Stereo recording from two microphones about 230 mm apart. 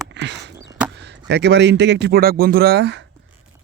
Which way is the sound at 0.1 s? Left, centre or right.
Right.